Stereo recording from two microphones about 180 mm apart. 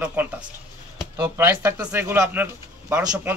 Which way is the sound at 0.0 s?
10° right (ahead or behind).